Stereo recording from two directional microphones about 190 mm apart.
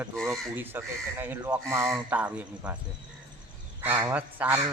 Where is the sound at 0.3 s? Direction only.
10° right (ahead or behind).